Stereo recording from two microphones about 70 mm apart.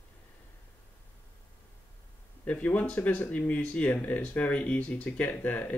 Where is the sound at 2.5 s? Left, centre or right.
Left.